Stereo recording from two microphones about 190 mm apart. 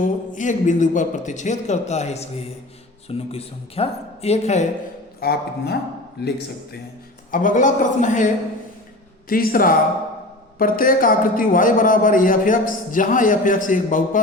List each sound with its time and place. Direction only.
0.0 s speech: 40° left (ahead or behind)
5.2 s speech: 55° left (ahead or behind)
7.3 s speech: 45° left (ahead or behind)
9.3 s a man's voice: 50° left (ahead or behind)